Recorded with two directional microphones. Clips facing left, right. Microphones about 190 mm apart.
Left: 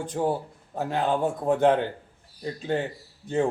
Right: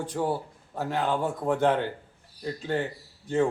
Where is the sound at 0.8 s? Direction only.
20° left (ahead or behind).